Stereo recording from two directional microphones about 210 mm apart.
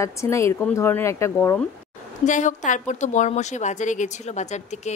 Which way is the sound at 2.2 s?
35° left (ahead or behind).